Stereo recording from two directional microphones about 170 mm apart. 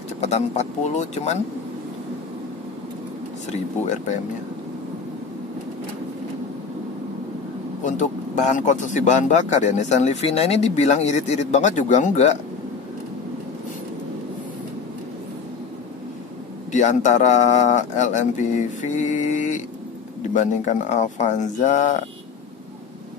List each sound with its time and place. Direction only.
0.2 s speech: 40° left (ahead or behind)
3.8 s speech: 45° left (ahead or behind)
7.8 s speech: 45° left (ahead or behind)
16.7 s speech: 45° left (ahead or behind)